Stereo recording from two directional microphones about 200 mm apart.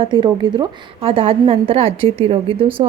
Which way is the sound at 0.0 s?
25° right (ahead or behind).